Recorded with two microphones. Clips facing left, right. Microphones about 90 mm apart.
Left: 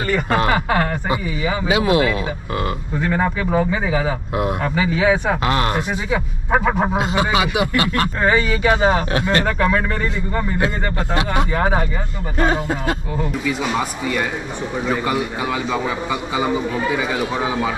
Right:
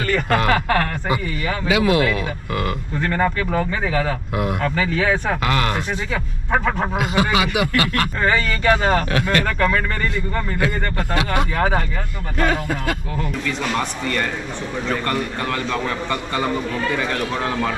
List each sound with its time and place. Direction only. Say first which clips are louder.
0.0 s a man's voice: left 1 dB; 10° left (ahead or behind)
1.7 s speech: even; 25° left (ahead or behind)
3.0 s a man's voice: even; 10° left (ahead or behind)
5.4 s speech: left 1 dB; 30° left (ahead or behind)
5.8 s a man's voice: left 3 dB; 10° left (ahead or behind)
7.0 s speech: left 1 dB; 25° left (ahead or behind)
8.2 s a man's voice: left 3 dB; 5° left (ahead or behind)
11.5 s a man's voice: left 1 dB; 5° left (ahead or behind)
12.4 s speech: left 2 dB; 25° left (ahead or behind)
13.2 s a man's voice: left 3 dB; 5° left (ahead or behind)